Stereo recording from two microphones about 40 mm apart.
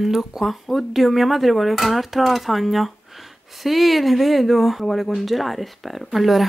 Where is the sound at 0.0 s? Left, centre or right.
Centre.